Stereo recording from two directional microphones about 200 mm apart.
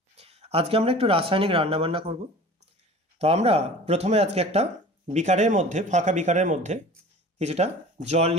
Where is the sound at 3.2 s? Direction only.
30° right (ahead or behind).